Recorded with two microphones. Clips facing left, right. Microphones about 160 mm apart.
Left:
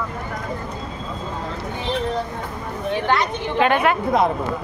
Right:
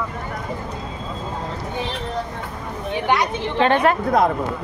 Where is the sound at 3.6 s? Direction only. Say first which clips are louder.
Right 1 dB; 35° right (ahead or behind).